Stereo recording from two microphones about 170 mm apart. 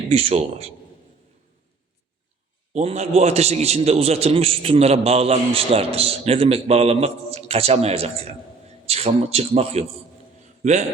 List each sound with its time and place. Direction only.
0.1 s a man's voice: 35° right (ahead or behind)
2.7 s a man's voice: 40° right (ahead or behind)